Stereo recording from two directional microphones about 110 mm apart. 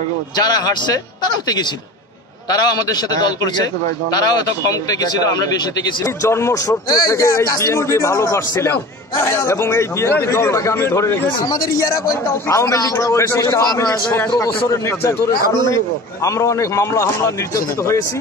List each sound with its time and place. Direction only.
0.4 s a man's voice: 35° left (ahead or behind)